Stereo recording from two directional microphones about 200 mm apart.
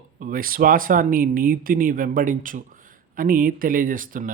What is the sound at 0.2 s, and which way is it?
A man's voice, 45° right (ahead or behind).